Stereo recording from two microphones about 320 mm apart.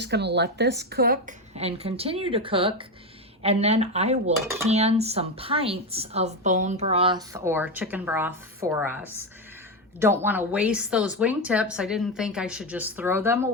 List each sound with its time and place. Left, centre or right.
0.0 s a woman's voice: right
4.4 s speech: centre
4.7 s speech: centre
10.0 s a woman's voice: centre